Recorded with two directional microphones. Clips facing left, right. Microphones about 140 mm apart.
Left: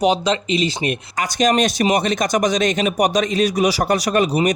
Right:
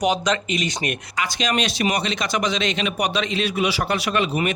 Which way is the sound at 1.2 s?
45° left (ahead or behind).